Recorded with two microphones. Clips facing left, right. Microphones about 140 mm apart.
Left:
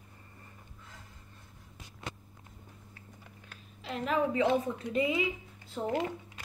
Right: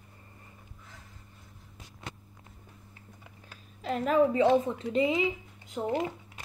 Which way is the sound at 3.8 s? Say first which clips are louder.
Right 5 dB; 45° right (ahead or behind).